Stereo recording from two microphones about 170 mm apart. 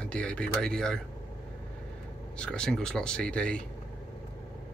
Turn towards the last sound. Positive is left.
turn(degrees=5)  # may be behind; listen again after turning